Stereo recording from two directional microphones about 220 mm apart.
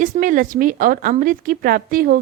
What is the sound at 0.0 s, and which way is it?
A woman's voice, 35° right (ahead or behind).